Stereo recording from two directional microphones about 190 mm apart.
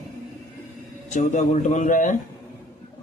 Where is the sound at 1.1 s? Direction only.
40° left (ahead or behind).